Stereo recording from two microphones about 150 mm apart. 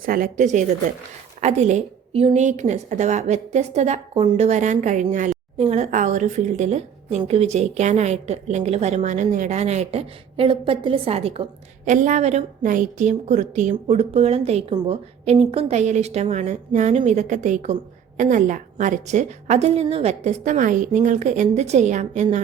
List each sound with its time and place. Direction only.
0.0 s a woman's voice: 70° right (ahead or behind); by 11.4 s 40° right (ahead or behind)
11.9 s a woman's voice: 55° right (ahead or behind)